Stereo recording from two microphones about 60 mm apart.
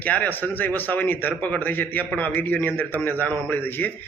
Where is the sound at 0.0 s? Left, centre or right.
Left.